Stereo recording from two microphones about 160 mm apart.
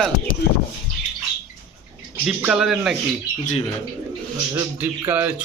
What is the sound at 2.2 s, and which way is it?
Speech, 5° right (ahead or behind).